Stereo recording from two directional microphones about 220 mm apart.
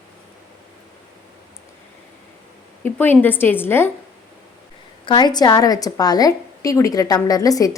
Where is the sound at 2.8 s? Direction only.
10° left (ahead or behind).